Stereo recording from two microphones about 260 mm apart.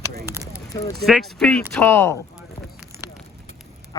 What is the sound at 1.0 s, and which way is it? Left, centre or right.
Speech, centre.